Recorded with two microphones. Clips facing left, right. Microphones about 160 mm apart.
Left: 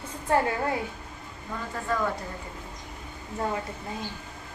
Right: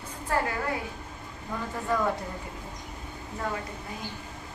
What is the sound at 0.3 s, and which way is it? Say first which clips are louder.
Speech: left 4 dB; 25° left (ahead or behind).